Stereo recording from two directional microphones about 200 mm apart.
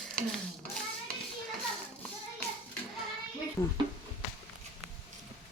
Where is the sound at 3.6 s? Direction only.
20° left (ahead or behind).